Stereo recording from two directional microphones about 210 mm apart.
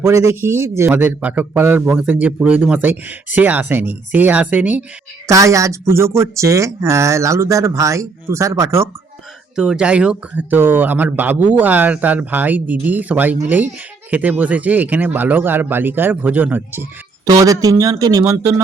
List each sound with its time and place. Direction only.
0.0 s a man's voice: 15° right (ahead or behind)